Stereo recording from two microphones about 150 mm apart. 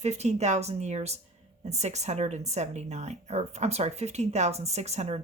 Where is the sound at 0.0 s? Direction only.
45° right (ahead or behind).